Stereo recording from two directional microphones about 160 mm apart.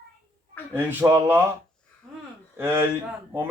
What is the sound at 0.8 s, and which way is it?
Speech, 15° right (ahead or behind).